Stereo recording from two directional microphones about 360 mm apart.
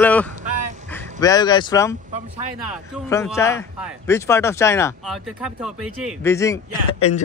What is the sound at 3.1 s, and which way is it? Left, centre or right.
Speech, centre.